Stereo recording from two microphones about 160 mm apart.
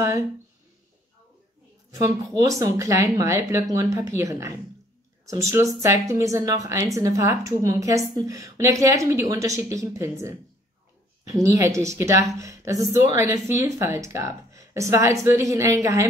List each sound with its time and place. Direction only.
1.9 s a woman's voice: 20° right (ahead or behind)
11.4 s a woman's voice: 20° right (ahead or behind)